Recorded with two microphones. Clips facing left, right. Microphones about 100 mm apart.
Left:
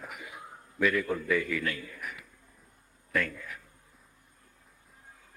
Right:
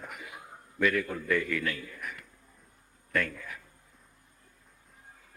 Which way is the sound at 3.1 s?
5° left (ahead or behind).